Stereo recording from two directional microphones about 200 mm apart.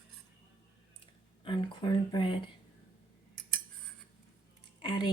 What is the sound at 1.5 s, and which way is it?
Speech, 20° left (ahead or behind).